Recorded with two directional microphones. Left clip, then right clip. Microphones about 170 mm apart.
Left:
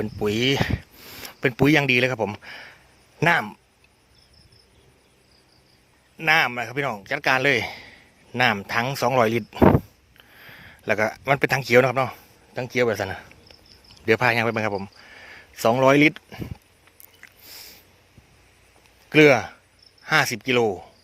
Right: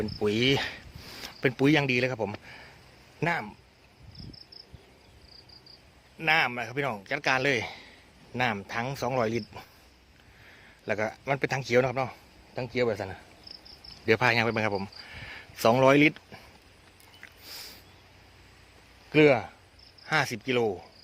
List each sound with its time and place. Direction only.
0.0 s speech: 35° left (ahead or behind); by 2.3 s 55° left (ahead or behind)
2.4 s speech: 65° left (ahead or behind)
6.1 s a man's voice: 45° left (ahead or behind)
12.5 s speech: 65° left (ahead or behind)
14.0 s speech: 35° left (ahead or behind)
17.2 s sniff: 25° left (ahead or behind)
19.1 s speech: 60° left (ahead or behind)
20.1 s a man's voice: 40° left (ahead or behind)